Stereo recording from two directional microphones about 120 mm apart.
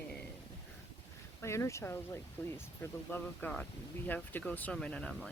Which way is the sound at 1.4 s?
25° left (ahead or behind).